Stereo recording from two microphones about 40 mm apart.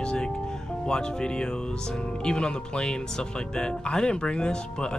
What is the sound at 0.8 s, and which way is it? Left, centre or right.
Speech, centre.